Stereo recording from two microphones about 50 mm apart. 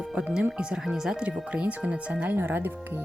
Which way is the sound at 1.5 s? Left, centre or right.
Right.